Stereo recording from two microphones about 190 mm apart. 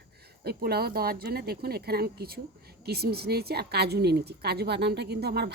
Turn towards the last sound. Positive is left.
turn(degrees=-60)  # may be behind; listen again after turning